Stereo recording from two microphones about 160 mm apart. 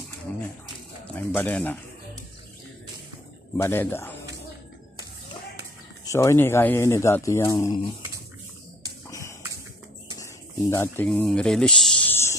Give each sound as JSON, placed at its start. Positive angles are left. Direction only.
{"t": 1.1, "sound": "speech", "side_deg": 10}
{"t": 3.6, "sound": "speech", "side_deg": 15}
{"t": 6.0, "sound": "speech", "side_deg": 20}
{"t": 10.7, "sound": "speech", "side_deg": 15}
{"t": 11.1, "sound": "a sound", "side_deg": 5}